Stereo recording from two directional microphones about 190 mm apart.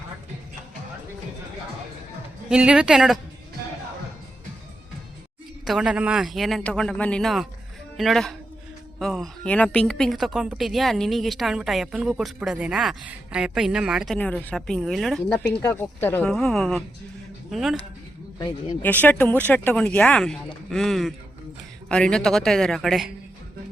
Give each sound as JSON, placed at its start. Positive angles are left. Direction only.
{"t": 2.5, "sound": "a woman's voice", "side_deg": -5}
{"t": 5.6, "sound": "a woman's voice", "side_deg": -5}
{"t": 18.3, "sound": "speech", "side_deg": 20}
{"t": 18.8, "sound": "a woman's voice", "side_deg": 10}